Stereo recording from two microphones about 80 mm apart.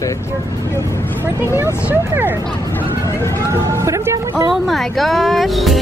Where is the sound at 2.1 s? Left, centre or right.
Right.